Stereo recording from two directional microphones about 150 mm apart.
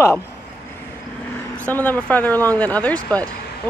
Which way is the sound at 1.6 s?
10° left (ahead or behind).